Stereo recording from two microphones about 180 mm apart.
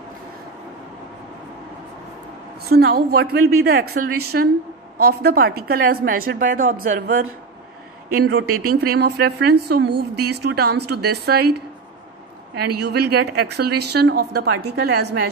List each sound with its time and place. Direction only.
2.7 s a woman's voice: 60° right (ahead or behind)
8.3 s speech: 60° right (ahead or behind)